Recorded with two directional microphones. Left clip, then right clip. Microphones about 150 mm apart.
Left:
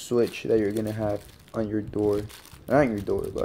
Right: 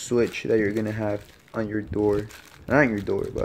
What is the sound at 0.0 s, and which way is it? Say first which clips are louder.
Speech: right 1 dB; 15° right (ahead or behind).